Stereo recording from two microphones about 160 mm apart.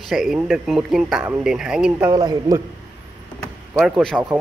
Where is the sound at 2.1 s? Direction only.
20° right (ahead or behind).